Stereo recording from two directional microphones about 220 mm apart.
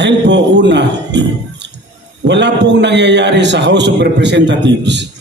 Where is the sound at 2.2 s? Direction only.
50° right (ahead or behind).